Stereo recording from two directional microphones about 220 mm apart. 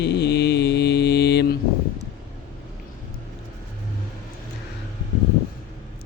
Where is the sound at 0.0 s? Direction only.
50° left (ahead or behind).